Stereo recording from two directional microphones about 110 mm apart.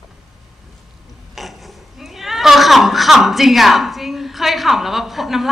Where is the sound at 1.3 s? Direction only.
Centre (ahead or behind).